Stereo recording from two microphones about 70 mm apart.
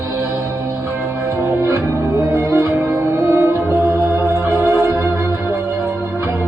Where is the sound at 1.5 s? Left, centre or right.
Right.